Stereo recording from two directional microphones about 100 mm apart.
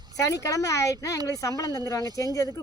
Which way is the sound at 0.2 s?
30° left (ahead or behind).